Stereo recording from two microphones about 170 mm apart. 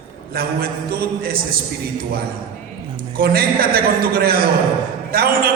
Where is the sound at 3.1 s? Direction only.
60° right (ahead or behind).